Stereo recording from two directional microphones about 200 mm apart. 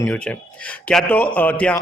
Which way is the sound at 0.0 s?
10° left (ahead or behind).